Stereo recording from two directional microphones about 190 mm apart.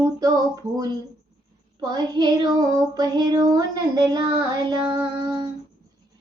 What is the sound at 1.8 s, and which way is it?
Child singing, 20° right (ahead or behind).